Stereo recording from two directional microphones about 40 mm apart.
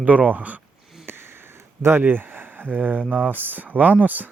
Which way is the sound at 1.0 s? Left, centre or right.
Right.